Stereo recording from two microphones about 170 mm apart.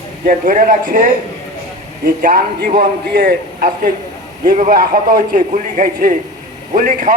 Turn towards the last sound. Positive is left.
turn(degrees=-50)  # may be behind; listen again after turning